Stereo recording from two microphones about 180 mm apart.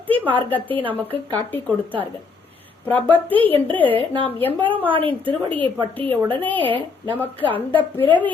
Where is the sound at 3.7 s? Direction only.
10° left (ahead or behind).